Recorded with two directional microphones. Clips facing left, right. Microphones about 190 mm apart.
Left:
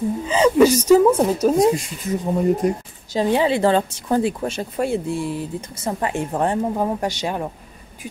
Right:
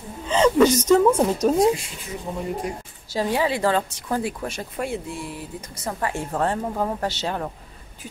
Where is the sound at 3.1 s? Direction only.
25° left (ahead or behind).